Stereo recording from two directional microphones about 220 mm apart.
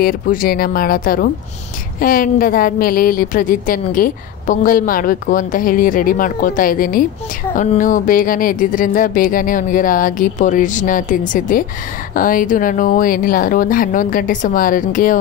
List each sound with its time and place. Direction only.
0.0 s a woman's voice: 40° left (ahead or behind)